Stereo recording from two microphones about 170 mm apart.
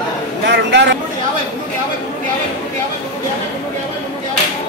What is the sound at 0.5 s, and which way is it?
Speech, 90° right.